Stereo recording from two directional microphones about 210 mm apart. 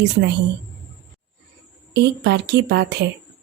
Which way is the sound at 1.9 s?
55° right (ahead or behind).